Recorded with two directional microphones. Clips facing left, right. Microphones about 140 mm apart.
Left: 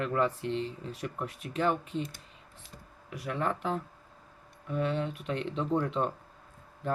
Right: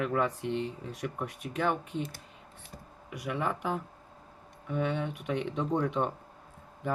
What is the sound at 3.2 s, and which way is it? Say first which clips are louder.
Speech: even; 5° right (ahead or behind).